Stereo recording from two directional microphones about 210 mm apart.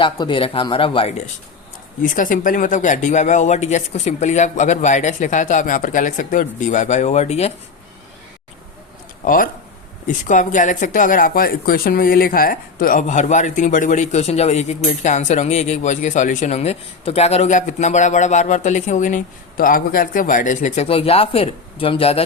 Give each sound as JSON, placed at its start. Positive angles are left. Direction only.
{"t": 0.0, "sound": "speech", "side_deg": 25}
{"t": 2.0, "sound": "speech", "side_deg": 40}
{"t": 9.2, "sound": "speech", "side_deg": 40}